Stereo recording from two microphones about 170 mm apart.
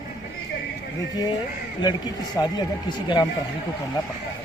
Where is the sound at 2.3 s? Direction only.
25° left (ahead or behind).